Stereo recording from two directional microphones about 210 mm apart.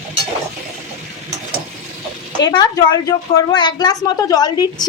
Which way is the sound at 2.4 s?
20° left (ahead or behind).